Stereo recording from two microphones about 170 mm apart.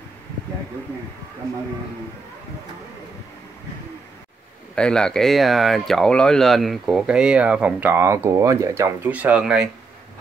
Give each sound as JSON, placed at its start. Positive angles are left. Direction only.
{"t": 4.7, "sound": "speech", "side_deg": 5}